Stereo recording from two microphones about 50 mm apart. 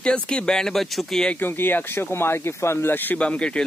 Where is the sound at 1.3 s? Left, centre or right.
Left.